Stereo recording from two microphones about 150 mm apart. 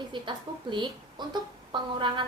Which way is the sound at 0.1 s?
30° right (ahead or behind).